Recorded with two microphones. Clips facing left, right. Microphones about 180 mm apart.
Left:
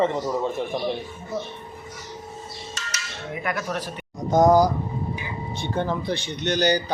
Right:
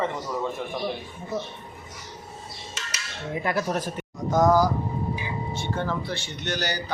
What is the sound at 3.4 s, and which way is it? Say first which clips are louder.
Speech: right 2 dB; 30° right (ahead or behind).